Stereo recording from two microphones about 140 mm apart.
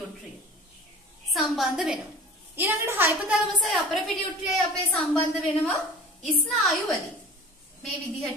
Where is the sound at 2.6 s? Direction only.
15° right (ahead or behind); by 5.2 s 5° left (ahead or behind).